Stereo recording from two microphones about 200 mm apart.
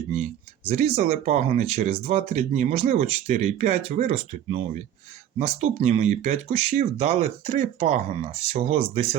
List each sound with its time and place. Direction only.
0.1 s speech: 35° right (ahead or behind)